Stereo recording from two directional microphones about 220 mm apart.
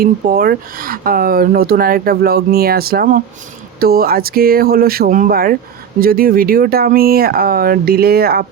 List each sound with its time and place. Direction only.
0.0 s speech: 40° right (ahead or behind)